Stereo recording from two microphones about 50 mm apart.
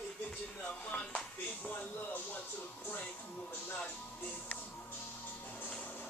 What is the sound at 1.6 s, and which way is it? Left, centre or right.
Speech, left.